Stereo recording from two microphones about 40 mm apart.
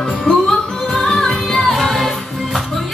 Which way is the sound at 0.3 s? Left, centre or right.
Centre.